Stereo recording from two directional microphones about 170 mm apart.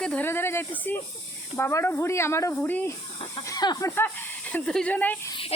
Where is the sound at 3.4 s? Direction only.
25° left (ahead or behind).